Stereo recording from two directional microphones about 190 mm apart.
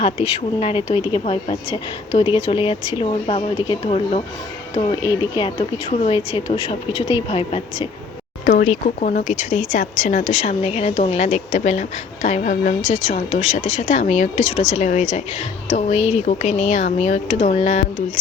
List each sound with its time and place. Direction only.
0.0 s speech: 30° left (ahead or behind)
9.0 s speech: 45° left (ahead or behind)